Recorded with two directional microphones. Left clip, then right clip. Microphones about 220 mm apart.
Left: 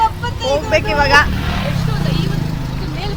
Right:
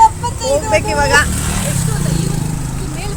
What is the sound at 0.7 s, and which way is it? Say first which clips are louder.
Speech: left 1 dB; centre (ahead or behind).